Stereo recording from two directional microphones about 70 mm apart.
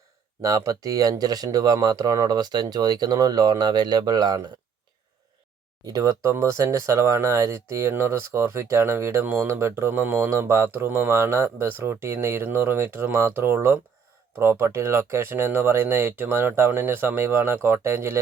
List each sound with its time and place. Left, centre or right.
0.4 s speech: right
5.8 s speech: right
6.4 s speech: right
10.0 s speech: right